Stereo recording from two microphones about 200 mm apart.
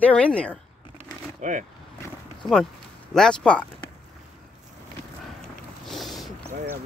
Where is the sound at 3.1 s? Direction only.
5° left (ahead or behind).